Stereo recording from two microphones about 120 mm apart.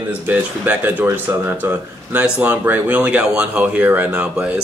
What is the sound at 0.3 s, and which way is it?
Speech, 15° right (ahead or behind).